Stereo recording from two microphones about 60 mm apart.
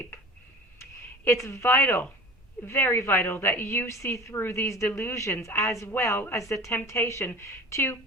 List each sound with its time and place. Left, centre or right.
0.8 s a woman's voice: left
4.9 s speech: left
5.1 s a woman's voice: left